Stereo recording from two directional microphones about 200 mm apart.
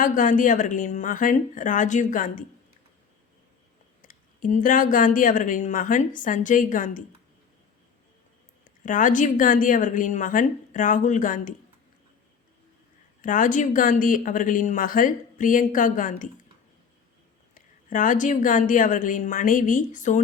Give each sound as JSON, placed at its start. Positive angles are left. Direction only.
{"t": 0.0, "sound": "speech", "side_deg": 40}
{"t": 4.0, "sound": "speech", "side_deg": 40}
{"t": 8.8, "sound": "speech", "side_deg": 40}
{"t": 13.2, "sound": "speech", "side_deg": 40}
{"t": 17.5, "sound": "speech", "side_deg": 40}